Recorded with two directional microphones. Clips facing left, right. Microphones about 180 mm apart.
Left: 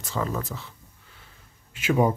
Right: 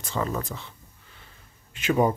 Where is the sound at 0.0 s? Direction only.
Centre (ahead or behind).